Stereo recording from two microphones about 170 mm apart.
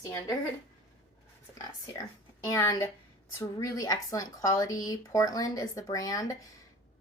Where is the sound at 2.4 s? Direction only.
20° left (ahead or behind).